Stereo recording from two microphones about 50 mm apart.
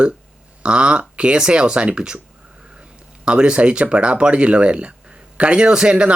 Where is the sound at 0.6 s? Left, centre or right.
Right.